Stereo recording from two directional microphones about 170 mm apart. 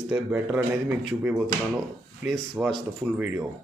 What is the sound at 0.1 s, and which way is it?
Speech, 10° right (ahead or behind).